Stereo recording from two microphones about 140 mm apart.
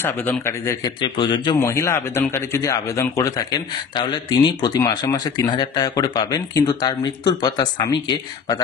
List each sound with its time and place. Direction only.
0.0 s a man's voice: 15° left (ahead or behind)
1.0 s a man's voice: 35° left (ahead or behind)
1.6 s a man's voice: 20° left (ahead or behind)